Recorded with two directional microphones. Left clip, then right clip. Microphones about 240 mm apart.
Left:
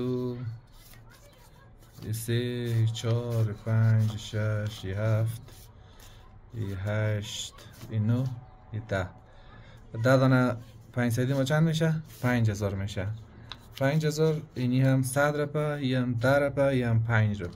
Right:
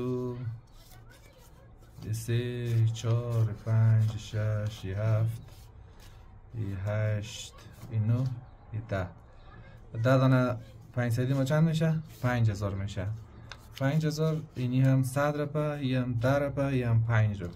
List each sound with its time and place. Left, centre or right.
0.0 s rub: centre
2.0 s a sound: left
2.8 s speech: left
6.8 s speech: left